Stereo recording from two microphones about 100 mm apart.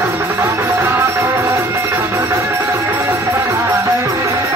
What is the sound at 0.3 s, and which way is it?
Music, 30° right (ahead or behind).